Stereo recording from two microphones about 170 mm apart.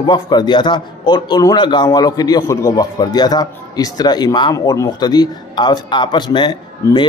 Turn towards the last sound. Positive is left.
turn(degrees=25)  # may be behind; listen again after turning